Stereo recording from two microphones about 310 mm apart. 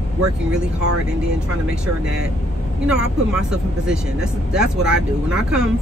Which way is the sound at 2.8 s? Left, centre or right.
Centre.